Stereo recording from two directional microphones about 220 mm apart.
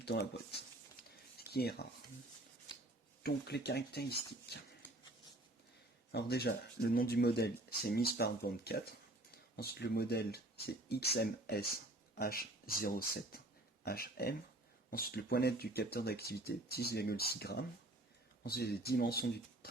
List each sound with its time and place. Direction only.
0.0 s speech: 50° left (ahead or behind)
1.4 s a sound: 45° left (ahead or behind)
3.2 s speech: 50° left (ahead or behind)
6.1 s speech: 50° left (ahead or behind)